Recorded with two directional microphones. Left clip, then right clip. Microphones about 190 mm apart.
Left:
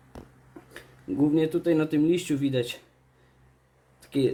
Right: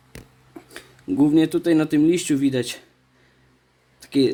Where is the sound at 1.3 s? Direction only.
55° right (ahead or behind).